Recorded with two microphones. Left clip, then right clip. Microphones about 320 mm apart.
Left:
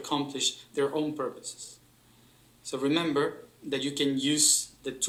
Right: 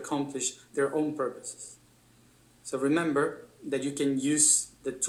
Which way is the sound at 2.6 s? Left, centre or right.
Centre.